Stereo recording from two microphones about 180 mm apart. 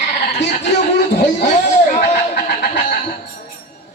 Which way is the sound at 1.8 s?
40° left (ahead or behind).